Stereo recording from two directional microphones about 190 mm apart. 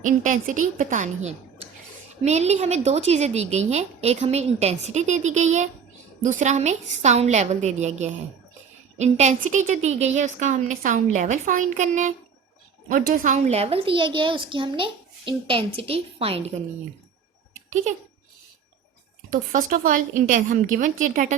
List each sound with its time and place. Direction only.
0.0 s a woman's voice: 45° right (ahead or behind)
17.5 s a sound: 40° right (ahead or behind)
19.3 s a woman's voice: 45° right (ahead or behind)